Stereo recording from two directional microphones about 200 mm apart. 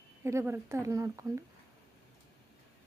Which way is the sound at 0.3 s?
15° right (ahead or behind).